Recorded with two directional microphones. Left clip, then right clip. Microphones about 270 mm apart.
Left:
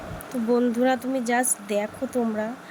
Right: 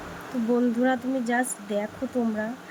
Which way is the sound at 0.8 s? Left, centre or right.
Left.